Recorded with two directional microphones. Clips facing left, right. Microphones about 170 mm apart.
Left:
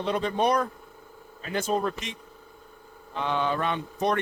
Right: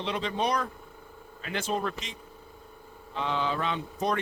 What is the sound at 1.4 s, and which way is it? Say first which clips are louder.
Speech: left 4 dB; 40° left (ahead or behind).